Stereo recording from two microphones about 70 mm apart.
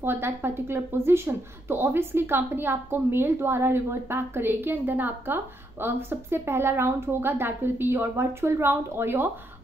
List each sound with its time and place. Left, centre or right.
0.0 s a woman's voice: right